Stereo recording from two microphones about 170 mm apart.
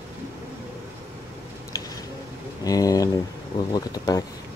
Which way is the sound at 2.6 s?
20° left (ahead or behind).